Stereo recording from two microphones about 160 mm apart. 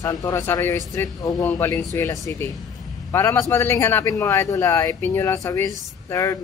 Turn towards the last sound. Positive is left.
turn(degrees=20)  # may be behind; listen again after turning